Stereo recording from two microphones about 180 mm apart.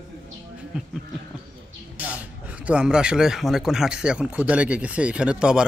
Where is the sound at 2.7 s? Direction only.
5° right (ahead or behind).